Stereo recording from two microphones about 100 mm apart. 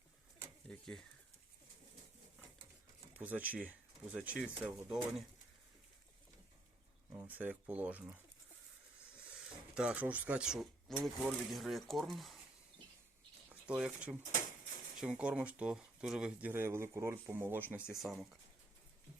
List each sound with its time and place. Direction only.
0.7 s speech: 5° left (ahead or behind)
3.2 s speech: 15° right (ahead or behind)
7.3 s speech: 15° right (ahead or behind)
9.1 s a sound: 10° right (ahead or behind)
10.9 s speech: 5° right (ahead or behind)
13.5 s speech: 10° right (ahead or behind)
15.2 s speech: 10° right (ahead or behind)
16.5 s speech: 25° right (ahead or behind)
18.0 s speech: centre (ahead or behind)